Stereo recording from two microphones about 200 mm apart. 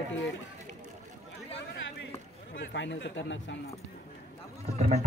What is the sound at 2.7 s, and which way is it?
Speech, 65° left (ahead or behind).